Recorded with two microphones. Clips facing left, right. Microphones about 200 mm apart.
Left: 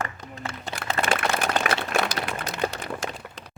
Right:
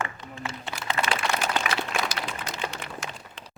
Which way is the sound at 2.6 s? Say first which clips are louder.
Left 9 dB; 40° left (ahead or behind).